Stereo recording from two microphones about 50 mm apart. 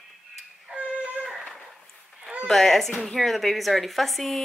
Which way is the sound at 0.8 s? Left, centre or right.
Right.